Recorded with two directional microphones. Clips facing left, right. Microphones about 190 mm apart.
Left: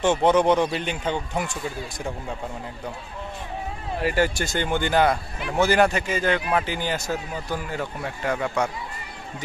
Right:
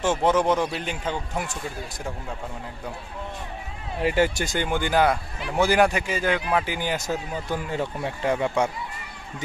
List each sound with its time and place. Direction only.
0.0 s speech: 5° right (ahead or behind)
4.0 s speech: 20° right (ahead or behind)